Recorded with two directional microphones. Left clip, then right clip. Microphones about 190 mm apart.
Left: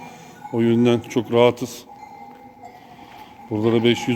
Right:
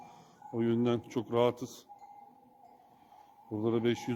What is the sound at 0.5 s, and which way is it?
Speech, 15° right (ahead or behind).